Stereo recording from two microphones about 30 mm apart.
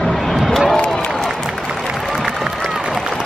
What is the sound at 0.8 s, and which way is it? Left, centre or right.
Applause, left.